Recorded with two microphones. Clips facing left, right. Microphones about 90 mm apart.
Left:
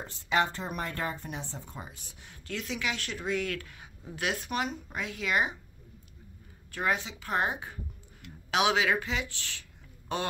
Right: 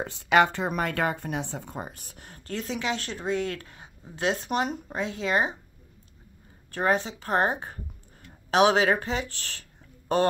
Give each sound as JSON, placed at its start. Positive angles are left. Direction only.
{"t": 0.0, "sound": "a woman's voice", "side_deg": -80}
{"t": 6.7, "sound": "a woman's voice", "side_deg": -35}